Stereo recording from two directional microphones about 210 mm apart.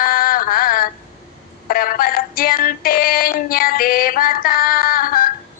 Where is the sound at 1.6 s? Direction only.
45° left (ahead or behind).